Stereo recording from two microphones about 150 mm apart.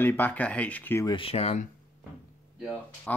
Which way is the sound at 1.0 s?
35° left (ahead or behind).